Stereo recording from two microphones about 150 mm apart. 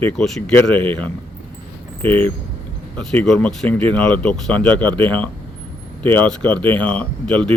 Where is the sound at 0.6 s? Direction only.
10° left (ahead or behind).